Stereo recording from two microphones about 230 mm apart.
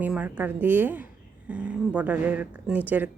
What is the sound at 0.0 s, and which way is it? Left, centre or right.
Speech, centre.